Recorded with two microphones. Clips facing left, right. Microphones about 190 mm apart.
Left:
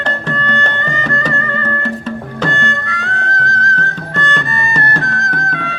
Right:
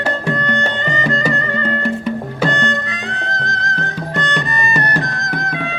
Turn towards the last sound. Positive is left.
turn(degrees=-15)  # may be behind; listen again after turning